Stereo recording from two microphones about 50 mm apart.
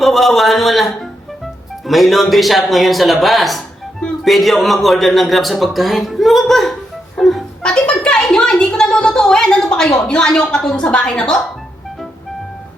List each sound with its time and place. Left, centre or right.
0.0 s speech: centre
7.2 s music: centre
7.6 s a sound: left
9.7 s speech: centre